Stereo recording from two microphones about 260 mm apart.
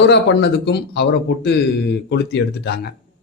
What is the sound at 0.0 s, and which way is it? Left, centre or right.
Speech, left.